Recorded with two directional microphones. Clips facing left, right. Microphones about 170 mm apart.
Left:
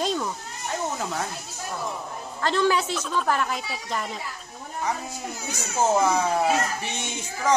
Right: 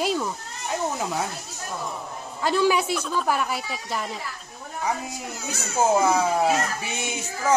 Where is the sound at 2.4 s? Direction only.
10° right (ahead or behind).